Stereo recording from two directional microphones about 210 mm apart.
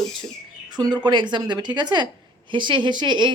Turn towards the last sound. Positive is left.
turn(degrees=-20)  # may be behind; listen again after turning